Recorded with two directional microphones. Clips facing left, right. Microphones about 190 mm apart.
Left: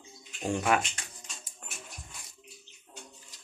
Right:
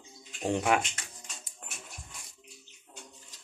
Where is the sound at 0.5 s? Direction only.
15° right (ahead or behind).